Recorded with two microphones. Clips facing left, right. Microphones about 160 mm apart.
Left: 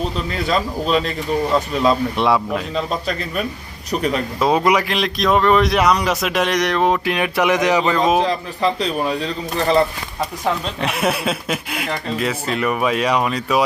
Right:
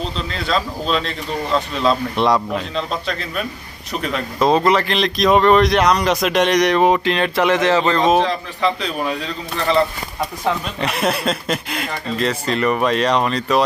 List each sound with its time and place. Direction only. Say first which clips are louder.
0.3 s a man's voice: even; 10° left (ahead or behind)
6.7 s speech: right 1 dB; 5° right (ahead or behind)
7.0 s speech: right 1 dB; 10° left (ahead or behind)
8.3 s a man's voice: left 1 dB; 35° left (ahead or behind)
10.8 s speech: even; 5° left (ahead or behind)